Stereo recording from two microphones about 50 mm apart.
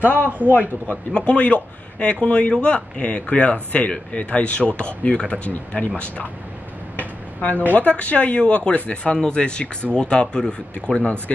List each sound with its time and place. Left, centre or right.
0.2 s speech: right
1.1 s speech: left
7.0 s a sound: left
7.7 s speech: left
11.0 s speech: left